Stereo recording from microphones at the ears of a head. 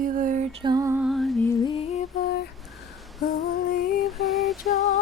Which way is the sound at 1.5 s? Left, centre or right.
Left.